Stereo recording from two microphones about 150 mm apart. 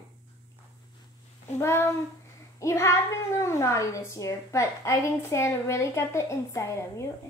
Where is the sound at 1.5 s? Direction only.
15° left (ahead or behind).